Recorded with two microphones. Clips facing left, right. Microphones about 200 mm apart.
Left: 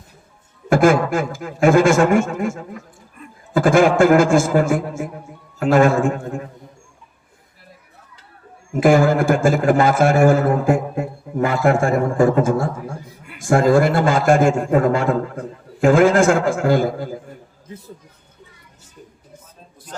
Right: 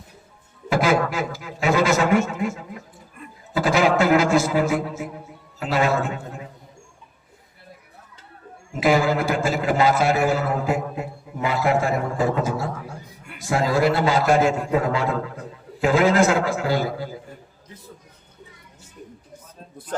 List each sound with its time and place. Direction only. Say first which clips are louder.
0.7 s a man's voice: left 6 dB; 50° left (ahead or behind)
8.7 s a man's voice: left 5 dB; 50° left (ahead or behind)